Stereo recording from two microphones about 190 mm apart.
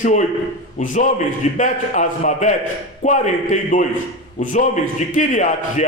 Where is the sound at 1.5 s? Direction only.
40° left (ahead or behind).